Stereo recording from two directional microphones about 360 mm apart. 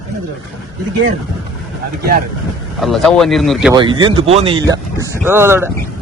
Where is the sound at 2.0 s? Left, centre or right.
Right.